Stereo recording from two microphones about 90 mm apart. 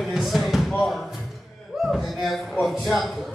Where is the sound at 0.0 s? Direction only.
5° right (ahead or behind).